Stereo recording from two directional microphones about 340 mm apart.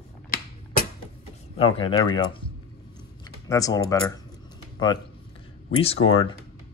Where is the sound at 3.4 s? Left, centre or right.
Centre.